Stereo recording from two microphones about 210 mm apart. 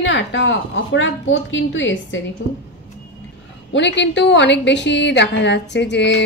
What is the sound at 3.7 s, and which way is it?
A woman's voice, 55° left (ahead or behind).